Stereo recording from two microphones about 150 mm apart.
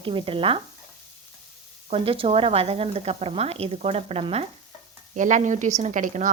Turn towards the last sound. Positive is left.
turn(degrees=-55)  # may be behind; listen again after turning